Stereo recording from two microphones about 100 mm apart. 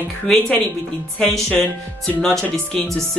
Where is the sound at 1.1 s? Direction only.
10° left (ahead or behind).